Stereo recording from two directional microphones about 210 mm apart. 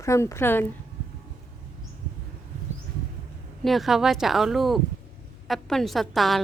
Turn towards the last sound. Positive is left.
turn(degrees=0)  # may be behind; listen again after turning